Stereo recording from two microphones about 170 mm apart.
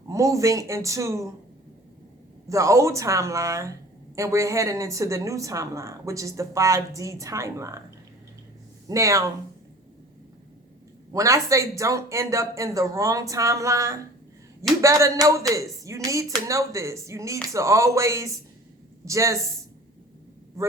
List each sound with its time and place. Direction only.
0.1 s speech: 20° right (ahead or behind)
2.5 s a woman's voice: 20° right (ahead or behind)
8.9 s a woman's voice: 20° right (ahead or behind)
11.1 s a woman's voice: 20° right (ahead or behind)